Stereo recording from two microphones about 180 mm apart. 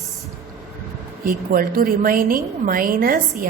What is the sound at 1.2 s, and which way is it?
A woman's voice, 50° right (ahead or behind).